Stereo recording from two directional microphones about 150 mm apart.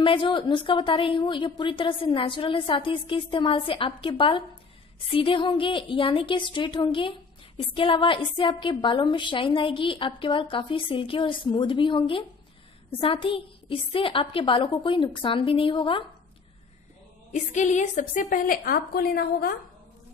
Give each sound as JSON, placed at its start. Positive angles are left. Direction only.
{"t": 0.0, "sound": "a woman's voice", "side_deg": 35}
{"t": 17.3, "sound": "a woman's voice", "side_deg": 55}